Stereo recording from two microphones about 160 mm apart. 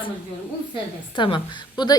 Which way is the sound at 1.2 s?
30° left (ahead or behind).